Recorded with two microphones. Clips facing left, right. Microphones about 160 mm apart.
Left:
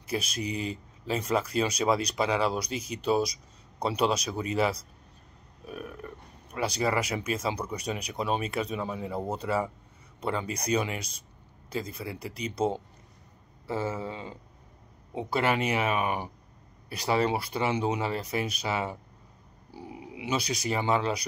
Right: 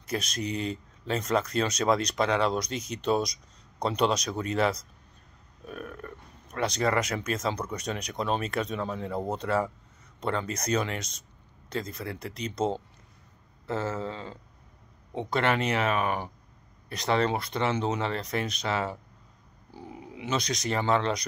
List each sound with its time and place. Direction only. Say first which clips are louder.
0.0 s speech: even; 5° left (ahead or behind)